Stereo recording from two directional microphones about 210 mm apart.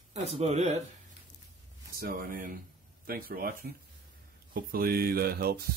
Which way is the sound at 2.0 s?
45° right (ahead or behind).